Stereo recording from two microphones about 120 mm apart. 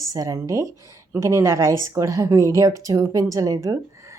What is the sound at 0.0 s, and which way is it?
Speech, 30° right (ahead or behind).